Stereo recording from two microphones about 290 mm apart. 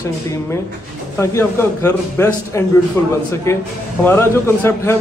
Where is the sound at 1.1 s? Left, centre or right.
Centre.